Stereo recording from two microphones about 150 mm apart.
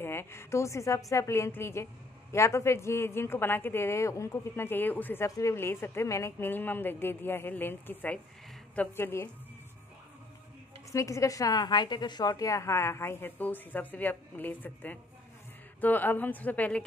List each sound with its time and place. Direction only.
0.0 s a woman's voice: 15° left (ahead or behind)
10.9 s a woman's voice: 20° left (ahead or behind)